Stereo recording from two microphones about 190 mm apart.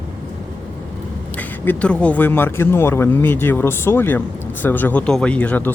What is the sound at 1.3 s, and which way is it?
Speech, 10° left (ahead or behind).